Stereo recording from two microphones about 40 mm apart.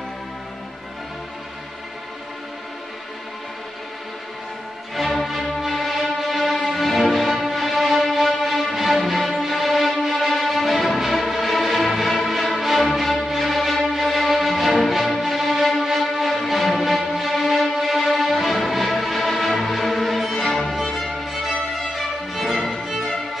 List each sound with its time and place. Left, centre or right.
4.9 s music: centre
20.7 s music: centre